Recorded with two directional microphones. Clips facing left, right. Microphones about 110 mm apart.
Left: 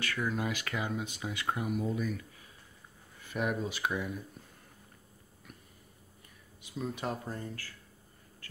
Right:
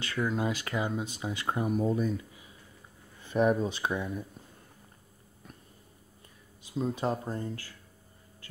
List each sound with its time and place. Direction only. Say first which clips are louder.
0.0 s speech: right 3 dB; 25° right (ahead or behind)
6.7 s speech: right 6 dB; 30° right (ahead or behind)